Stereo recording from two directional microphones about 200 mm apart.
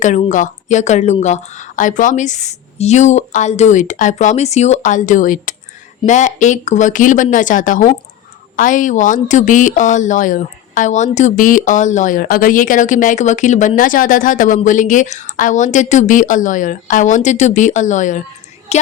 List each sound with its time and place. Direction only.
0.0 s a woman's voice: 35° left (ahead or behind)